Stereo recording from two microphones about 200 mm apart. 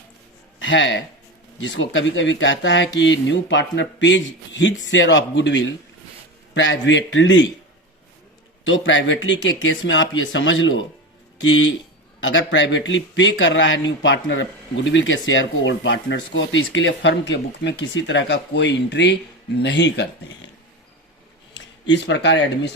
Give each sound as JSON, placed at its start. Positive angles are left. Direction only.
{"t": 0.6, "sound": "speech", "side_deg": 65}
{"t": 8.6, "sound": "speech", "side_deg": 65}
{"t": 21.5, "sound": "speech", "side_deg": 60}